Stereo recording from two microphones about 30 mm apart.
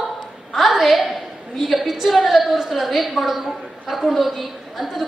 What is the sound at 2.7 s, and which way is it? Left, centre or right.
A woman's voice, centre.